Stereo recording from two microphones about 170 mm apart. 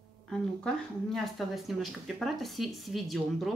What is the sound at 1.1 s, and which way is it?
Speech, centre (ahead or behind).